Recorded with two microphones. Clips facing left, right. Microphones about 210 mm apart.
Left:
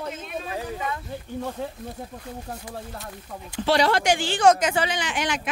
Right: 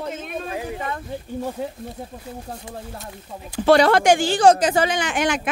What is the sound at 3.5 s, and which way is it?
Speech, 50° right (ahead or behind).